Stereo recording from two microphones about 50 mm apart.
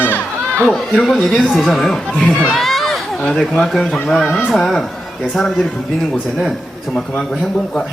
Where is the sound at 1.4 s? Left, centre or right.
Centre.